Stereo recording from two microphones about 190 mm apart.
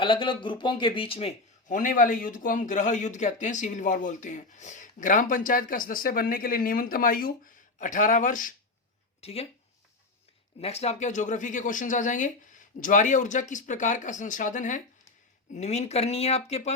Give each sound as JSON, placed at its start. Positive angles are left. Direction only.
{"t": 0.0, "sound": "speech", "side_deg": 25}
{"t": 1.6, "sound": "speech", "side_deg": 40}
{"t": 9.2, "sound": "speech", "side_deg": 30}
{"t": 10.6, "sound": "speech", "side_deg": 35}